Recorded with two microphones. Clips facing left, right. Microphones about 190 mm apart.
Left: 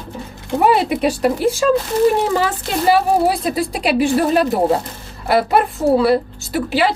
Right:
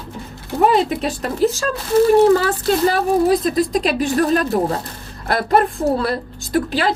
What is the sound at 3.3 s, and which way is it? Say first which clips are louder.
A woman's voice: right 4 dB; 10° left (ahead or behind).